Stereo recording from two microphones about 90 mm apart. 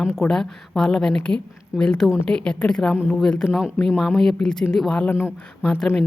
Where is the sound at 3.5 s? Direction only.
5° right (ahead or behind).